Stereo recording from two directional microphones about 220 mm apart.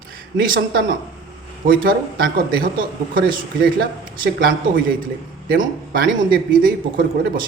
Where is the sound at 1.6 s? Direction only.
40° right (ahead or behind).